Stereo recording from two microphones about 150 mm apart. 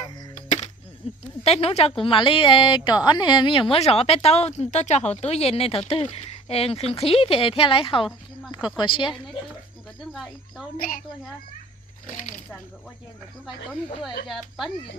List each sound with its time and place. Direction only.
1.0 s a woman's voice: 40° left (ahead or behind)
10.0 s speech: centre (ahead or behind)
14.3 s speech: centre (ahead or behind)